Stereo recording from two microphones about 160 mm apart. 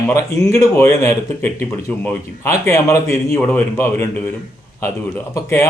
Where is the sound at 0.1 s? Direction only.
20° left (ahead or behind).